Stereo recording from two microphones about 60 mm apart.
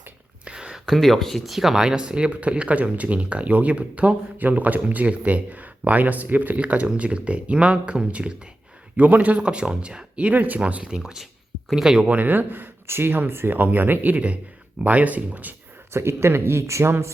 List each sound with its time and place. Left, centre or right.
0.4 s a sound: centre
0.9 s speech: centre
12.0 s speech: right
15.9 s speech: right